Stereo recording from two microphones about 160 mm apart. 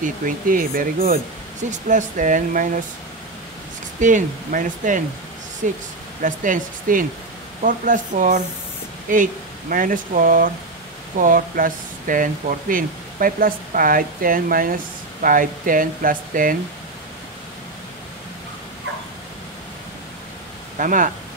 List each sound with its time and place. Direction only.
0.0 s speech: 60° right (ahead or behind)
4.0 s speech: 55° right (ahead or behind)
20.7 s speech: 55° right (ahead or behind)